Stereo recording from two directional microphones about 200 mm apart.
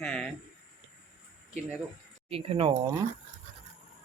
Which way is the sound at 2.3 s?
30° right (ahead or behind).